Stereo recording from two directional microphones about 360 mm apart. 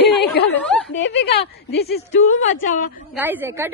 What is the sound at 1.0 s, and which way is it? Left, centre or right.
Speech, left.